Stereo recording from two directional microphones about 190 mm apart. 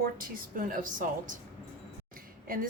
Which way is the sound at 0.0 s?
45° right (ahead or behind).